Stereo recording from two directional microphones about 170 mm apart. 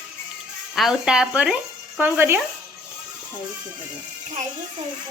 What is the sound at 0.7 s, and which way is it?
A woman's voice, centre (ahead or behind).